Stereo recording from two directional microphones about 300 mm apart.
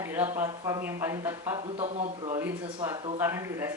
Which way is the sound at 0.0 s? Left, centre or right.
Centre.